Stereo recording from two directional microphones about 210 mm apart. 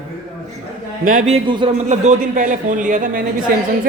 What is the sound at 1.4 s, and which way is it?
A man's voice, 25° right (ahead or behind).